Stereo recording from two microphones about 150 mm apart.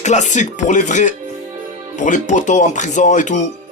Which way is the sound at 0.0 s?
50° left (ahead or behind).